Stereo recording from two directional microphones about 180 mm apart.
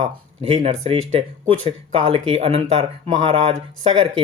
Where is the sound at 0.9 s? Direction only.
30° right (ahead or behind).